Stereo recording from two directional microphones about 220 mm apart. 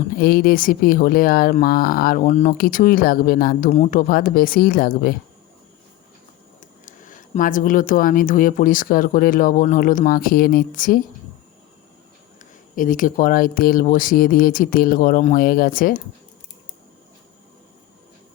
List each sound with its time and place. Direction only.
0.2 s speech: 45° left (ahead or behind)
6.8 s speech: 35° left (ahead or behind)
12.4 s speech: 40° left (ahead or behind)